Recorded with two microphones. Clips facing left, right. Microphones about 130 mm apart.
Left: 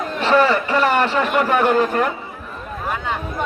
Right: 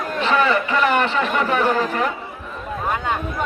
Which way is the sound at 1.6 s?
50° left (ahead or behind).